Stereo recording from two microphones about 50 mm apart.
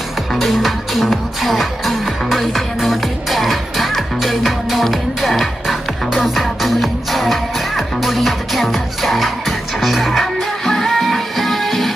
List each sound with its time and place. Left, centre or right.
0.3 s music: centre